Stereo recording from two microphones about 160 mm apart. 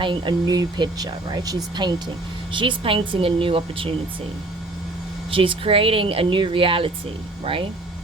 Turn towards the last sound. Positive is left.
turn(degrees=-35)  # may be behind; listen again after turning